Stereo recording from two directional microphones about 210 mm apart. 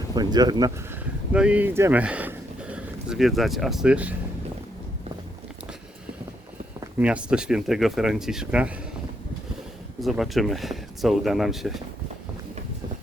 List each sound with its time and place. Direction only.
0.1 s speech: 20° right (ahead or behind)
1.3 s speech: 5° right (ahead or behind)
6.7 s speech: 5° right (ahead or behind)
10.0 s speech: centre (ahead or behind)